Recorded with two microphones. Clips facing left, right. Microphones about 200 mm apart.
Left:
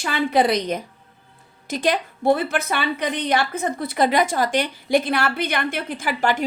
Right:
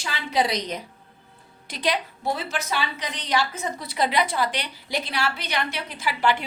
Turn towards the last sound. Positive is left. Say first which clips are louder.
# left 2 dB
turn(degrees=45)  # may be behind; listen again after turning